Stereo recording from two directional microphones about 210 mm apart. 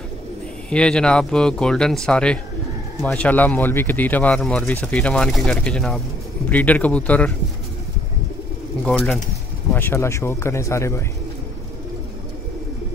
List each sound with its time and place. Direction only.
0.7 s speech: 5° left (ahead or behind)
8.8 s speech: centre (ahead or behind)